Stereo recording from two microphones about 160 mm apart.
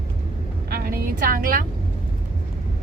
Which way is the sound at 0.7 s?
65° right (ahead or behind).